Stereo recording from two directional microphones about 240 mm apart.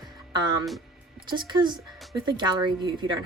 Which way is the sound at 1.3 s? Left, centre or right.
Centre.